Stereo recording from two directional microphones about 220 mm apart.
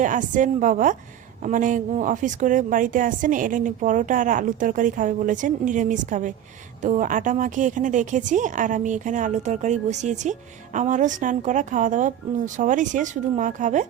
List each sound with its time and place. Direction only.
0.0 s a woman's voice: 35° right (ahead or behind)